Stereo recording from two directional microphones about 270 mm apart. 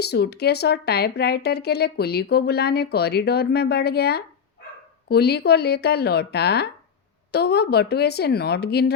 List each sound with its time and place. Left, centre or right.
0.0 s speech: left